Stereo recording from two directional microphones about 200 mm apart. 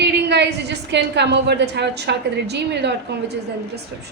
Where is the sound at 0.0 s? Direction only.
60° right (ahead or behind).